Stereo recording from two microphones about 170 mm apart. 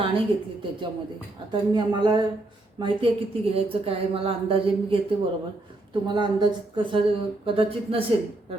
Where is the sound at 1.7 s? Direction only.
25° right (ahead or behind).